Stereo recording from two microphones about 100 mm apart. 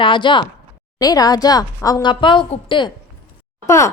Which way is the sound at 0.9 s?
40° left (ahead or behind).